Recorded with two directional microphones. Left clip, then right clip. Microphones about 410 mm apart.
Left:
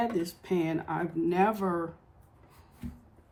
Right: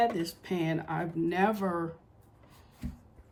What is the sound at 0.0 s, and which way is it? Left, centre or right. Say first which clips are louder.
Speech: right 2 dB; centre.